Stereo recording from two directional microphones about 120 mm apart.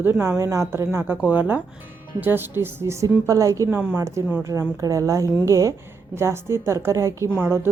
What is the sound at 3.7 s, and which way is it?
A woman's voice, 15° right (ahead or behind).